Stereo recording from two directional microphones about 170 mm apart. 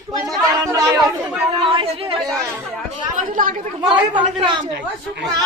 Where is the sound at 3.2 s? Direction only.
55° right (ahead or behind).